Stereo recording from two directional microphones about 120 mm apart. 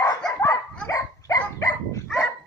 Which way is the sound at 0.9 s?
30° left (ahead or behind).